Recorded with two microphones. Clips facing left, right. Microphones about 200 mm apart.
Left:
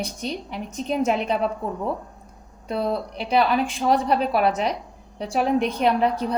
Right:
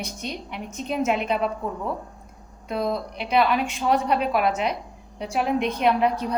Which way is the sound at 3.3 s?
35° left (ahead or behind).